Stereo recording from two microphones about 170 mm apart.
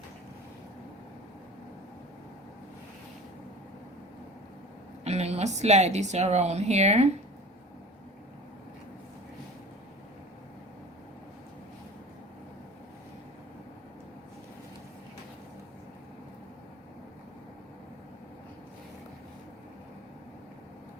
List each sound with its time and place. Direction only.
5.0 s speech: 40° right (ahead or behind)